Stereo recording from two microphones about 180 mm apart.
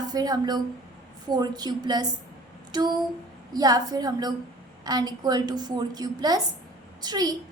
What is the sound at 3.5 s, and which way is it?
A woman's voice, 20° right (ahead or behind).